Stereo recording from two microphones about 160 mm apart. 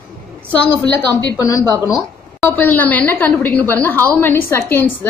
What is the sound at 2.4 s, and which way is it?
A woman's voice, 10° left (ahead or behind).